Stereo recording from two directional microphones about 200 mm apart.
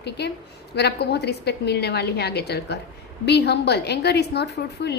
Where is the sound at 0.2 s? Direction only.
55° left (ahead or behind).